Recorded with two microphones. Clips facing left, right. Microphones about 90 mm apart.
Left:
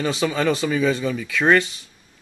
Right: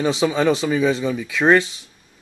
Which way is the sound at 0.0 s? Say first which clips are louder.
Right 3 dB; 15° right (ahead or behind).